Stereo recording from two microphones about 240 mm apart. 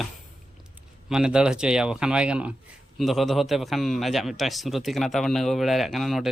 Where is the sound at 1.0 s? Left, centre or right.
Centre.